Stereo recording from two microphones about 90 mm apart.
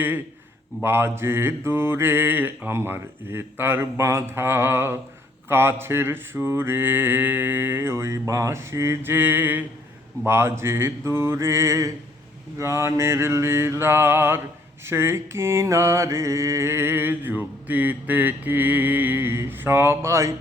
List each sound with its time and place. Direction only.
0.8 s mantra: 25° right (ahead or behind)